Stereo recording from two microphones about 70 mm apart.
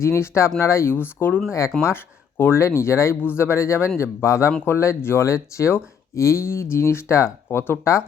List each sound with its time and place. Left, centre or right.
0.0 s speech: left
1.2 s speech: left